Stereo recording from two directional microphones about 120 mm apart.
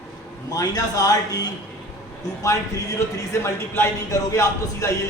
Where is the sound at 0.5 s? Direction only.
30° left (ahead or behind).